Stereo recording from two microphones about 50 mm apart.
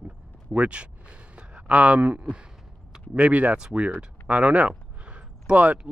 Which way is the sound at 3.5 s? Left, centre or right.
Centre.